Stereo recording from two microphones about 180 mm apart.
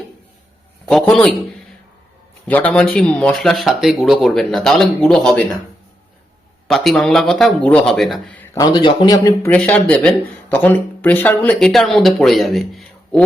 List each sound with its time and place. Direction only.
0.9 s speech: centre (ahead or behind)
2.5 s speech: 10° left (ahead or behind)
6.7 s speech: centre (ahead or behind)
8.5 s speech: 25° left (ahead or behind); by 13.2 s 5° left (ahead or behind)